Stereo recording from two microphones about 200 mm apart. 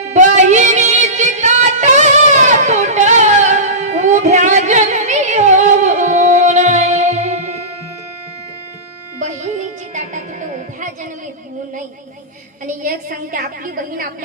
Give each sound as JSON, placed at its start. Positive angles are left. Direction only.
{"t": 0.1, "sound": "music", "side_deg": -35}
{"t": 9.9, "sound": "music", "side_deg": -40}
{"t": 12.6, "sound": "a sound", "side_deg": -40}